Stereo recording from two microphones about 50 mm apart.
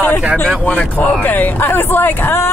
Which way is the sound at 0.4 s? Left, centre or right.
Left.